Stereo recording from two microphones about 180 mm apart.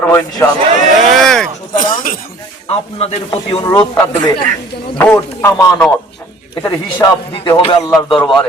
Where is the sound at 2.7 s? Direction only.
30° left (ahead or behind).